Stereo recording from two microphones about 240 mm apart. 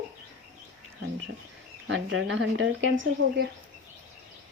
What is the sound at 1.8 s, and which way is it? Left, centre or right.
Speech, right.